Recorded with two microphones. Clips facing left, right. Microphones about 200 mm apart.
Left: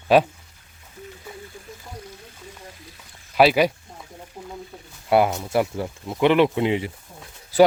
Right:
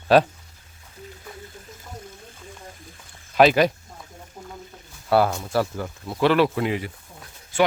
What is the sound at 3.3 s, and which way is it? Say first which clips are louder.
Speech: even; 10° left (ahead or behind).